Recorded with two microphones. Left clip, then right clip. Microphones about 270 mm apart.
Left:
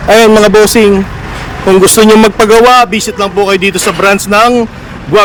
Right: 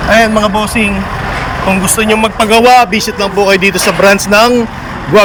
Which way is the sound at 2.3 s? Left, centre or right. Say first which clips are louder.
Right 2 dB; centre.